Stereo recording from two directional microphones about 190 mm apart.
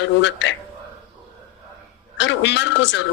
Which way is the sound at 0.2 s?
70° left (ahead or behind).